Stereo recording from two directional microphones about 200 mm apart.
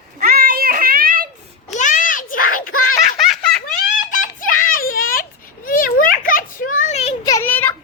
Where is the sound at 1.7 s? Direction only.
40° left (ahead or behind).